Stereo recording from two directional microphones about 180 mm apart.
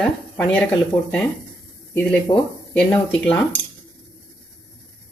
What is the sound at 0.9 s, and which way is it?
Speech, 25° left (ahead or behind).